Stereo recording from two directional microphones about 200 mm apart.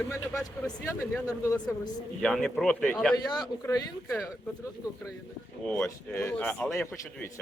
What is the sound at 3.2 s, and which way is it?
Speech, 20° left (ahead or behind).